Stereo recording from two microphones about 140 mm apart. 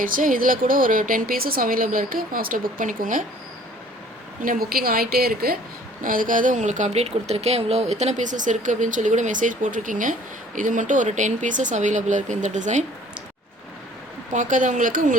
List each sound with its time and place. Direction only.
0.0 s speech: 75° right (ahead or behind)
4.4 s a woman's voice: 90° right
6.0 s speech: 75° right (ahead or behind); by 12.8 s 60° right (ahead or behind)
14.3 s speech: 65° right (ahead or behind)